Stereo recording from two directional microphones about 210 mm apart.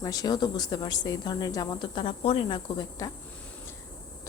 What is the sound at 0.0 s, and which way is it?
Speech, 15° left (ahead or behind).